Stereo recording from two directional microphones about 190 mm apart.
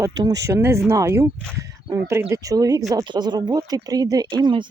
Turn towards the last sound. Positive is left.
turn(degrees=-25)  # may be behind; listen again after turning